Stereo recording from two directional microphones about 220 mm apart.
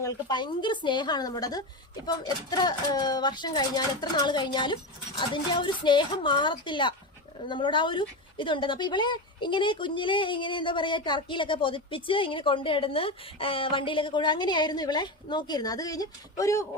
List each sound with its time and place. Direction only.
0.0 s speech: 20° left (ahead or behind)